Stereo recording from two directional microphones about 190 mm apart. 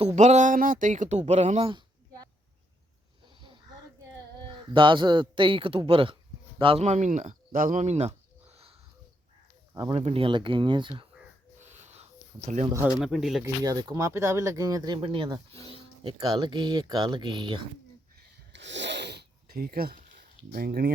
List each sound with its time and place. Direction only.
0.2 s speech: 40° right (ahead or behind)
4.7 s speech: 25° right (ahead or behind)
9.9 s speech: 30° right (ahead or behind)
11.5 s a sound: 40° right (ahead or behind)
12.7 s speech: 5° right (ahead or behind)
13.4 s speech: 20° right (ahead or behind)
18.5 s zipper: 70° right (ahead or behind); by 20.0 s 50° right (ahead or behind)
20.5 s speech: 55° right (ahead or behind)